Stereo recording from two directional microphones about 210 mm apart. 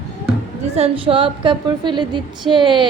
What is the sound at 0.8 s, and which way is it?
A woman's voice, 25° right (ahead or behind).